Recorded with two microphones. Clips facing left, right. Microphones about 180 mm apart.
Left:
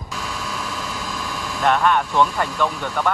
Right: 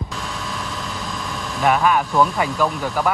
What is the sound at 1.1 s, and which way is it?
Speech, centre (ahead or behind).